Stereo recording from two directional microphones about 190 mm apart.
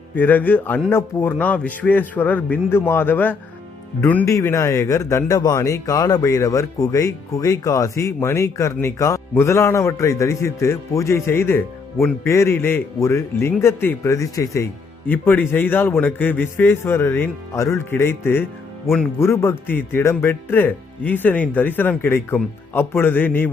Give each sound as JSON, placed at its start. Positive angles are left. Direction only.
{"t": 0.2, "sound": "a man's voice", "side_deg": 10}